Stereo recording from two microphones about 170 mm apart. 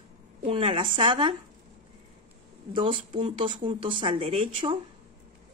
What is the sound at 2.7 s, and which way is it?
A woman's voice, 30° right (ahead or behind).